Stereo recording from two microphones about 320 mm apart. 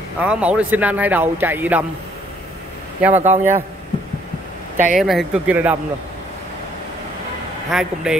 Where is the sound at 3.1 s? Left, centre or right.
Right.